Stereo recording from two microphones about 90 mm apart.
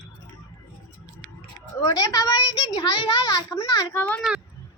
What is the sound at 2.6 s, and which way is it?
A child's voice, 45° left (ahead or behind).